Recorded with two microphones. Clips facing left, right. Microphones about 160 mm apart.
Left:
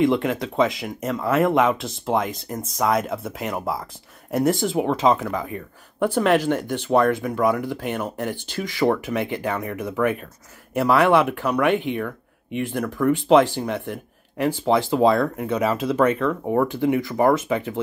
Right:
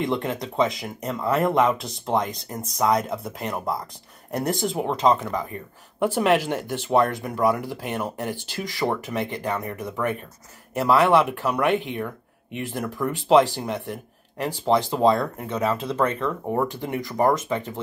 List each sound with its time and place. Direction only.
0.0 s speech: centre (ahead or behind)